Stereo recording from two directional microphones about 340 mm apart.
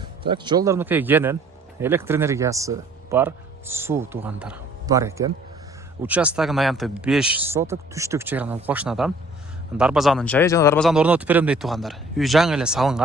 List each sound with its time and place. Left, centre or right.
0.0 s speech: centre